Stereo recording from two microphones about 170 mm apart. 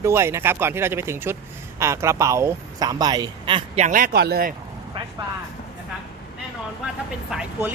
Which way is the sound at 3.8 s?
55° right (ahead or behind).